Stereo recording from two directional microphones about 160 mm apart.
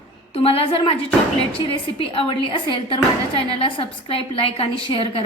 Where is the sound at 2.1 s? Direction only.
30° left (ahead or behind).